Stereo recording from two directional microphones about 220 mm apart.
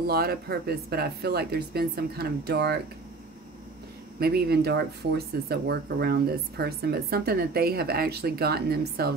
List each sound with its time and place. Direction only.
0.0 s speech: 45° right (ahead or behind)
4.2 s speech: 45° right (ahead or behind)